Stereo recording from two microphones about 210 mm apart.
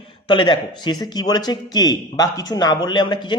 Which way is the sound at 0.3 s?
20° left (ahead or behind).